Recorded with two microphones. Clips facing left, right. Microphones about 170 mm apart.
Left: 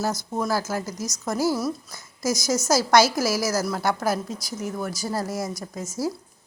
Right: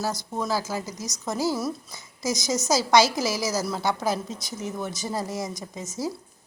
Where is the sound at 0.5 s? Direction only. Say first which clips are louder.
Left 2 dB; 15° right (ahead or behind).